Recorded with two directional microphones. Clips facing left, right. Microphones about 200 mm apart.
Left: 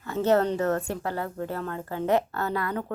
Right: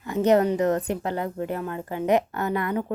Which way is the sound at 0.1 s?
15° right (ahead or behind).